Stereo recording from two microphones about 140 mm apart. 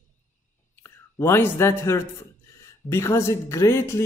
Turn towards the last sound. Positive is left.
turn(degrees=20)  # may be behind; listen again after turning